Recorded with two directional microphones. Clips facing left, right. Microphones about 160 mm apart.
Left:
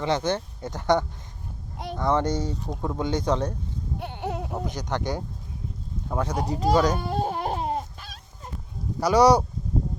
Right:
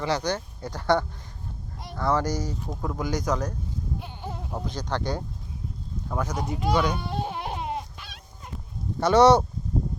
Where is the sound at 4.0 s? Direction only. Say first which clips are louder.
Left 6 dB; 65° left (ahead or behind).